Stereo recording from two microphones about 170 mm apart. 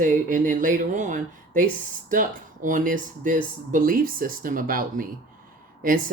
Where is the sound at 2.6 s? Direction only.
50° right (ahead or behind).